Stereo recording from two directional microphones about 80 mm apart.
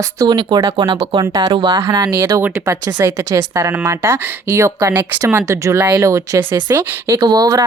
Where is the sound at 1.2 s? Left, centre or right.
Right.